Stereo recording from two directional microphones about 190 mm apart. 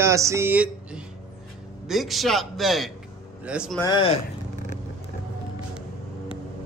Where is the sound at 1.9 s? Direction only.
Centre (ahead or behind).